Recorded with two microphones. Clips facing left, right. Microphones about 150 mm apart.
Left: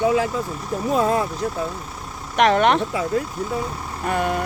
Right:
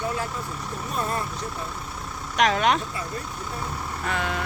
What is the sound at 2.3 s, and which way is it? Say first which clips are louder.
Speech: left 5 dB; 55° left (ahead or behind).